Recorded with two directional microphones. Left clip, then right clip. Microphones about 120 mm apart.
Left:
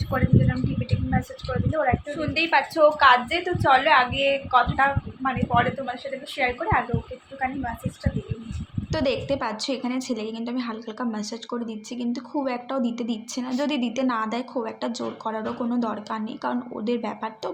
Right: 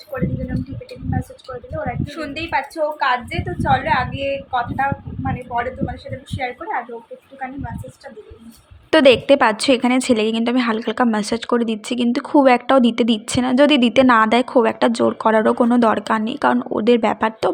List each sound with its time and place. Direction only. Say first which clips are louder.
1.8 s a woman's voice: left 1 dB; 10° left (ahead or behind)
6.3 s a woman's voice: left 1 dB; 15° left (ahead or behind)
8.9 s a woman's voice: right 13 dB; 90° right; by 17.5 s 60° right (ahead or behind)